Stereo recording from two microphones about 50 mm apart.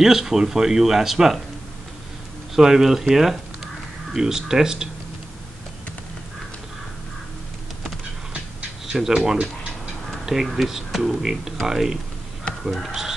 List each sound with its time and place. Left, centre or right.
0.0 s speech: centre
2.5 s speech: centre
8.3 s a sound: right
9.1 s speech: centre